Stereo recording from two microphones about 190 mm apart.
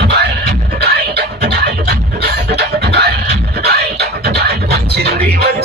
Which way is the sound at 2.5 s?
60° right (ahead or behind).